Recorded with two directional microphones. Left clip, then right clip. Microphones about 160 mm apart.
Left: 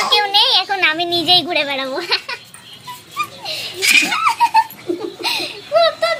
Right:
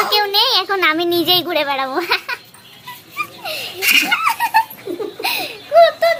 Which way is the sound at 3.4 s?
30° right (ahead or behind).